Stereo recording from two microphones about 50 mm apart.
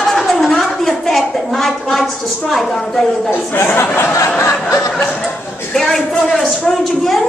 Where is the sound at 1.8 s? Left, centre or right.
Centre.